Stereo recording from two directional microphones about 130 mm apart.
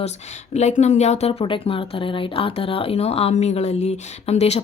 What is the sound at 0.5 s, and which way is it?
A woman's voice, 60° left (ahead or behind).